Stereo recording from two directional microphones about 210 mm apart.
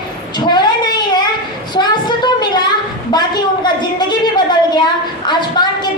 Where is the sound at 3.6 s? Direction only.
20° left (ahead or behind).